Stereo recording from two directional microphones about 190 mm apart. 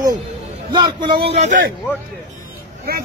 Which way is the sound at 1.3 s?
40° right (ahead or behind).